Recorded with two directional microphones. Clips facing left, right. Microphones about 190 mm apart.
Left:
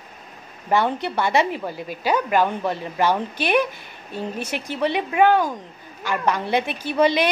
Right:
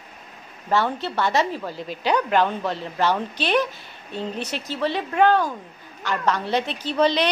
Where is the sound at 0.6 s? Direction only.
15° left (ahead or behind).